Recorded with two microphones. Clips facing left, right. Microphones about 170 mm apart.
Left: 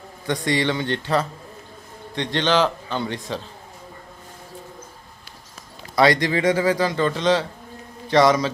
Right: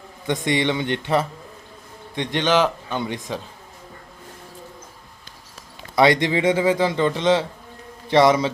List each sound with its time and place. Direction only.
0.3 s a man's voice: 20° right (ahead or behind)
6.0 s a man's voice: 20° right (ahead or behind)